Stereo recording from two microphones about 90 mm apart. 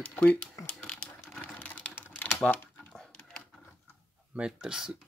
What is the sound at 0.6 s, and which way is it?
Crumpling, 10° left (ahead or behind).